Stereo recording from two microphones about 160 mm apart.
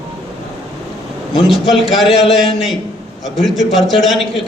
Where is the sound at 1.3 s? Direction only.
Centre (ahead or behind).